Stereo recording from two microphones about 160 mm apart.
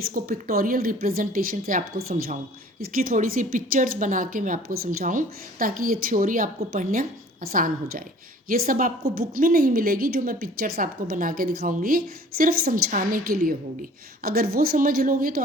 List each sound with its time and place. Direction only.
0.0 s a woman's voice: 65° right (ahead or behind)